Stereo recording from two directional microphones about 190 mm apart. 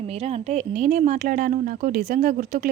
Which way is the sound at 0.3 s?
40° right (ahead or behind).